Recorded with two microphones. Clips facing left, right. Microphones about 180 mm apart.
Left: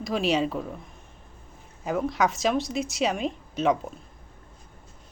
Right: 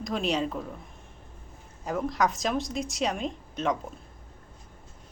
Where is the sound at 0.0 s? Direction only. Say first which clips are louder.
Left 3 dB; 5° left (ahead or behind).